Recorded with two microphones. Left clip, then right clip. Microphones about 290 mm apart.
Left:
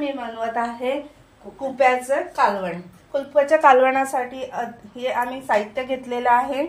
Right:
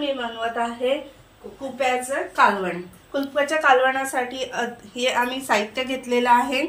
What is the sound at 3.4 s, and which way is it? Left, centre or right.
A woman's voice, left.